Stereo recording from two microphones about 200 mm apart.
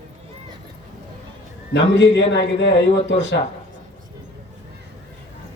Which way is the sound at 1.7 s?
60° left (ahead or behind).